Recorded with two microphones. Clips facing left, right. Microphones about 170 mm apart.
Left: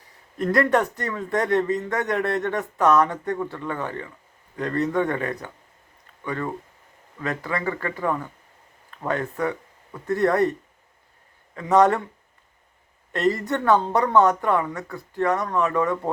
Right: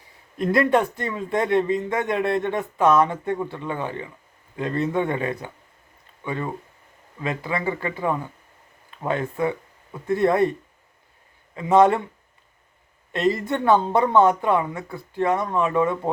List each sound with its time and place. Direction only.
0.3 s speech: 20° right (ahead or behind)
11.5 s speech: 20° right (ahead or behind)
13.1 s speech: 20° right (ahead or behind)